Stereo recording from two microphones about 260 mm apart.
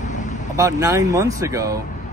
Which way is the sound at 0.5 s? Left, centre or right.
Centre.